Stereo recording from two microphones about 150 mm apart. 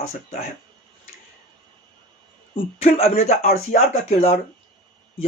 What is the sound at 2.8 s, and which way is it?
Speech, 45° left (ahead or behind).